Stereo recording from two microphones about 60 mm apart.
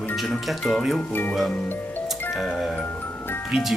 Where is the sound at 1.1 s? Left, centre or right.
Left.